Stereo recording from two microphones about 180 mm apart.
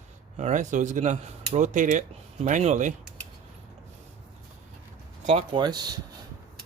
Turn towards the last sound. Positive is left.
turn(degrees=-25)  # may be behind; listen again after turning